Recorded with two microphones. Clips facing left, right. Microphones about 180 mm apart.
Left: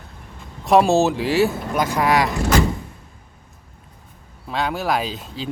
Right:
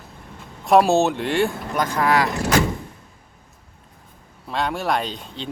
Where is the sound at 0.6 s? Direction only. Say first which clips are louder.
Left 1 dB; centre (ahead or behind).